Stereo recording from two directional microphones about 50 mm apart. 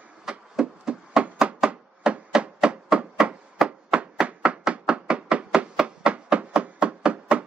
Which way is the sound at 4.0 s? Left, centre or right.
Right.